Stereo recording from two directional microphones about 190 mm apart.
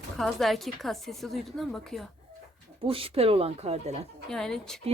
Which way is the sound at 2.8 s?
30° right (ahead or behind).